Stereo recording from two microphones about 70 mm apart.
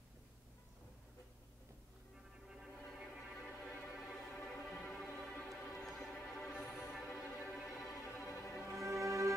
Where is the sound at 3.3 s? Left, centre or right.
Centre.